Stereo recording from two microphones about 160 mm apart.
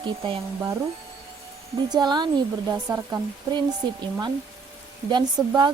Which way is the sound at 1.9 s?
25° right (ahead or behind).